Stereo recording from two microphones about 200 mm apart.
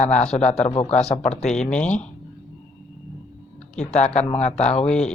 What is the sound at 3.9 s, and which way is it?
Speech, 35° left (ahead or behind).